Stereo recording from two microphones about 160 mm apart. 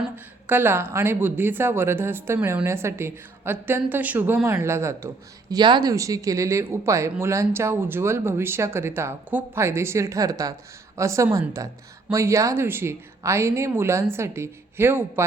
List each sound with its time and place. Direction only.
0.4 s speech: 10° right (ahead or behind)